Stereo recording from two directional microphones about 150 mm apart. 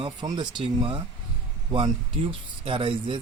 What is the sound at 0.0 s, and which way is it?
Speech, 30° right (ahead or behind).